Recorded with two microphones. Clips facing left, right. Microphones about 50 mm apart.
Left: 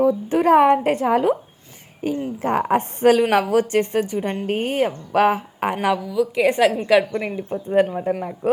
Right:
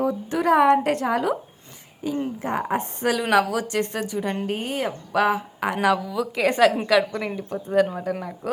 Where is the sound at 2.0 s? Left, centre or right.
Left.